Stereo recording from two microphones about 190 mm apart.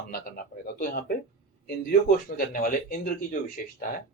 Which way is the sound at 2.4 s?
50° left (ahead or behind).